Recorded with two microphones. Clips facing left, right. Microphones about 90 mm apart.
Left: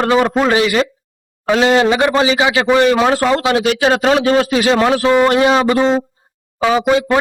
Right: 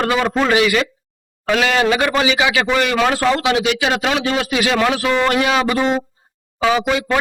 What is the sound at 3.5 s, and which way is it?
A man's voice, 35° left (ahead or behind).